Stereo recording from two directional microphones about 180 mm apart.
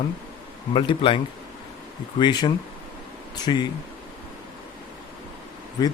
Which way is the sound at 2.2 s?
25° left (ahead or behind).